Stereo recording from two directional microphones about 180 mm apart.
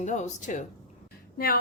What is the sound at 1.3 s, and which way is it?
Speech, 55° left (ahead or behind).